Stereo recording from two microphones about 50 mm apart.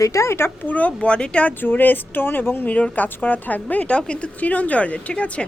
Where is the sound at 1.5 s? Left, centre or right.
Left.